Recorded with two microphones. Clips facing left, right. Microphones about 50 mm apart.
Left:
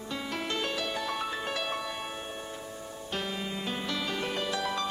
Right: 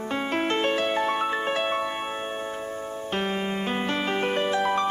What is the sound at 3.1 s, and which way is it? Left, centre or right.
Music, right.